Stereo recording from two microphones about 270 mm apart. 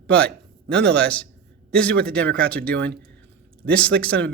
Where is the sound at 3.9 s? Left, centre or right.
Right.